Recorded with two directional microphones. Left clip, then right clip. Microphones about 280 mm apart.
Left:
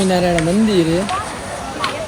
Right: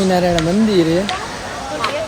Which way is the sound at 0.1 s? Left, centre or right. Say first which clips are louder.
Right 1 dB; centre.